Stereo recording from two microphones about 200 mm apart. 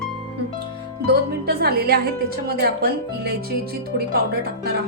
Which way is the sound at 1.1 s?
55° right (ahead or behind).